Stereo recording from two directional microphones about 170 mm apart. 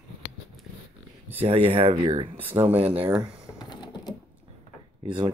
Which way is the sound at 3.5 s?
25° left (ahead or behind).